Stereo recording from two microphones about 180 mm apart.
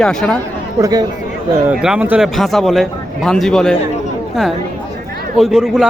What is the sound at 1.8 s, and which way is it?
Speech, 5° right (ahead or behind).